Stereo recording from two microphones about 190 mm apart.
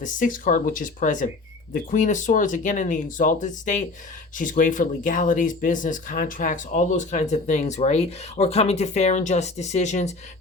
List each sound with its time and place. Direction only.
0.0 s speech: 45° left (ahead or behind)